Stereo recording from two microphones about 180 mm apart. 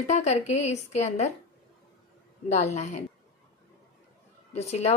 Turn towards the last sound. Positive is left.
turn(degrees=35)  # may be behind; listen again after turning